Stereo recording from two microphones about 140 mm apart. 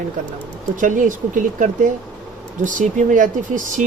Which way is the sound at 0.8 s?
65° right (ahead or behind).